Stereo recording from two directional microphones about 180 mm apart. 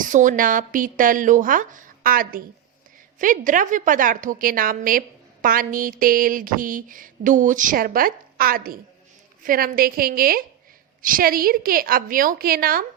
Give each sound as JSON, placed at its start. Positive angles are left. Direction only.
{"t": 0.0, "sound": "a woman's voice", "side_deg": -45}